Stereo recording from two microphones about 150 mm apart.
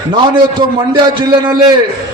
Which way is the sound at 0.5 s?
30° right (ahead or behind).